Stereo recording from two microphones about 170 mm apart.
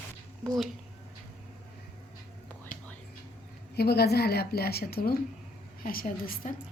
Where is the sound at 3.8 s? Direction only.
70° left (ahead or behind).